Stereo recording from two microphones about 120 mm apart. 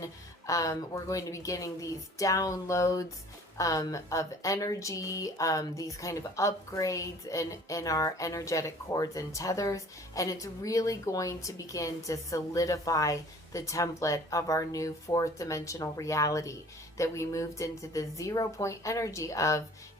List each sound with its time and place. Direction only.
0.0 s a woman's voice: 25° left (ahead or behind)